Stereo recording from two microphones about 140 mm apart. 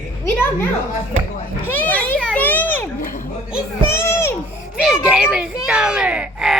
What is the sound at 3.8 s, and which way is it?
Speech, 20° left (ahead or behind).